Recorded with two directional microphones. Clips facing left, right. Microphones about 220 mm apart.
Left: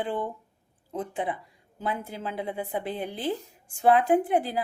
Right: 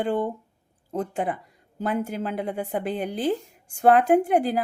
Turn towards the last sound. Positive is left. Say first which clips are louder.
# right 4 dB
turn(degrees=-45)  # may be behind; listen again after turning